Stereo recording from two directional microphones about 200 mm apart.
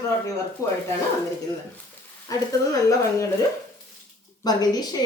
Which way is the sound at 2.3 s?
15° left (ahead or behind).